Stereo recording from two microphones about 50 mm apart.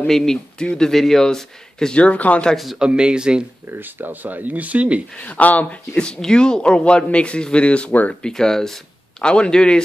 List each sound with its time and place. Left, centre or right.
0.0 s speech: centre
2.0 s a man's voice: left
2.5 s a man's voice: centre
2.8 s speech: centre
3.7 s speech: right
5.1 s speech: left
5.9 s a man's voice: centre
8.2 s speech: centre
9.2 s a man's voice: centre